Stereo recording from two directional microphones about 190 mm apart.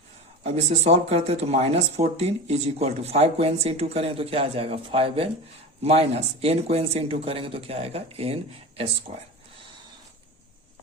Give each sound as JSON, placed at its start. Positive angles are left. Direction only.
{"t": 0.4, "sound": "speech", "side_deg": -35}